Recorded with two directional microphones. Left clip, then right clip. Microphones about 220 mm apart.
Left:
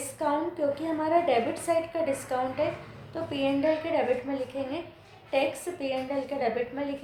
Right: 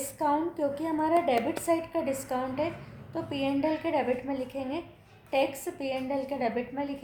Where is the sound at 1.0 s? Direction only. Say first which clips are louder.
Left 2 dB; 20° right (ahead or behind).